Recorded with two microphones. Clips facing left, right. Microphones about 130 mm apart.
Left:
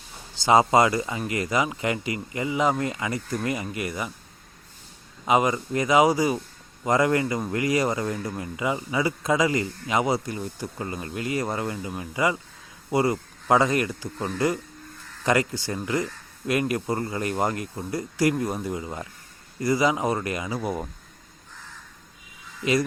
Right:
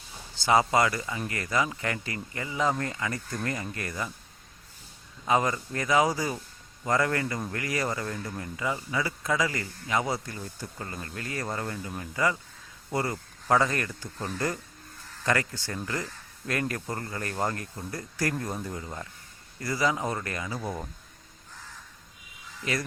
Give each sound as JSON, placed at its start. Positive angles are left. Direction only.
{"t": 0.3, "sound": "speech", "side_deg": 20}
{"t": 5.2, "sound": "speech", "side_deg": 15}